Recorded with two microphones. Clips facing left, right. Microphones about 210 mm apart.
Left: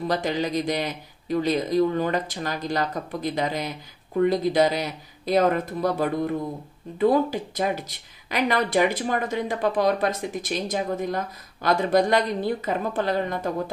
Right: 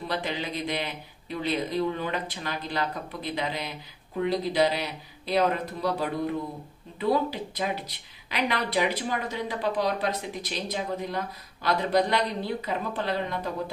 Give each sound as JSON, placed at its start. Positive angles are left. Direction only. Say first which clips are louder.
{"t": 0.1, "sound": "speech", "louder": "left 6 dB", "side_deg": 40}